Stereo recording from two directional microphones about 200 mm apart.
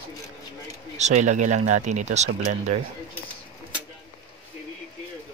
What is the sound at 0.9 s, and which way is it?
Speech, 35° right (ahead or behind).